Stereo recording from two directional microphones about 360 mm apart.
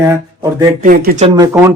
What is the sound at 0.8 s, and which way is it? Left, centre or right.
Speech, right.